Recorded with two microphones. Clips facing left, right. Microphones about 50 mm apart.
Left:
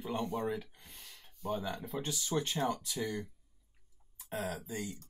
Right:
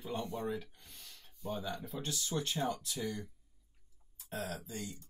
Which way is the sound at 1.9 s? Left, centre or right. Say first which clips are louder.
Left 5 dB; left.